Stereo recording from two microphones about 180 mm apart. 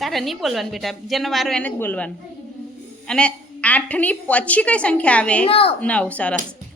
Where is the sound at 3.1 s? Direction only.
5° left (ahead or behind).